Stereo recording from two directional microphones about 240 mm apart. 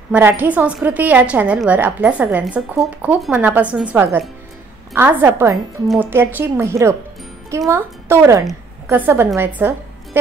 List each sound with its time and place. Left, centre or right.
0.1 s a woman's voice: centre